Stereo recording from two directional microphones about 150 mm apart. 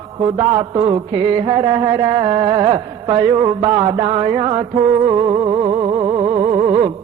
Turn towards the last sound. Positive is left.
turn(degrees=-35)  # may be behind; listen again after turning